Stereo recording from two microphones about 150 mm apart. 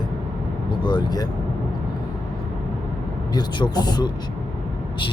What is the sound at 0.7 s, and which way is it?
Speech, 30° left (ahead or behind).